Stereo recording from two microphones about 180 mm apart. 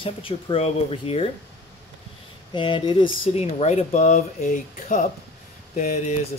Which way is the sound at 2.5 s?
25° left (ahead or behind).